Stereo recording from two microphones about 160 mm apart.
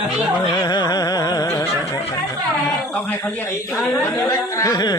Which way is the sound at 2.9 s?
10° left (ahead or behind).